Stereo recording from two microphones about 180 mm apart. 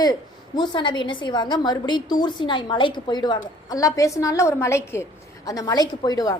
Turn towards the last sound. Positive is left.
turn(degrees=20)  # may be behind; listen again after turning